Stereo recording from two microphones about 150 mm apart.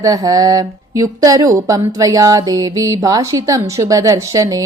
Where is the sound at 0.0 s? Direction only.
25° right (ahead or behind).